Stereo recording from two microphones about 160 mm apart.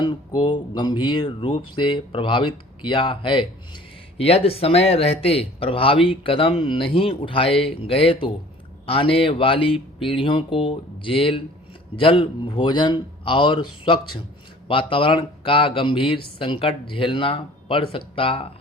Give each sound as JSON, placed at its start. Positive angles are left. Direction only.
{"t": 0.0, "sound": "speech", "side_deg": 25}